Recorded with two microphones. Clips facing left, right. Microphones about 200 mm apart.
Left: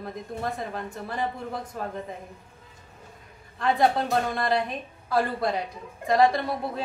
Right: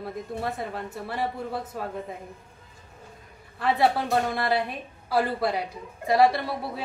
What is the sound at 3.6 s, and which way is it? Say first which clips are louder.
A woman's voice: even; 5° right (ahead or behind).